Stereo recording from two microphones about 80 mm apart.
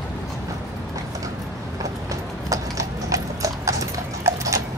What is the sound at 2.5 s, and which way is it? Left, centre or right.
Clip-clop, right.